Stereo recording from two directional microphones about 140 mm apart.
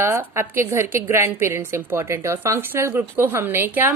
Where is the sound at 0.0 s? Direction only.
20° right (ahead or behind).